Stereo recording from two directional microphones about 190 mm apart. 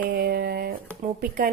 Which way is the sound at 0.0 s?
50° right (ahead or behind).